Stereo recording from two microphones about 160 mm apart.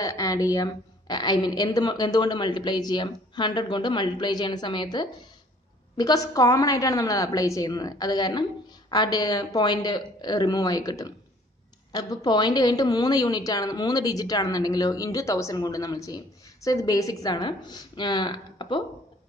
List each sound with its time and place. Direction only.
0.0 s a woman's voice: 20° left (ahead or behind)